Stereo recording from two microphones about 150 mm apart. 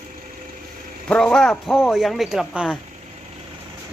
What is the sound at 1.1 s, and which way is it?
Speech, 5° left (ahead or behind).